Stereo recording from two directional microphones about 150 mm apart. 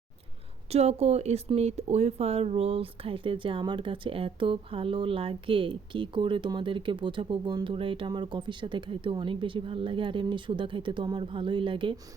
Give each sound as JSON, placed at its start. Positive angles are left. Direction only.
{"t": 0.7, "sound": "speech", "side_deg": -45}